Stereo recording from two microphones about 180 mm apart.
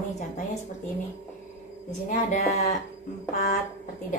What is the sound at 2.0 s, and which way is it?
Speech, 40° left (ahead or behind).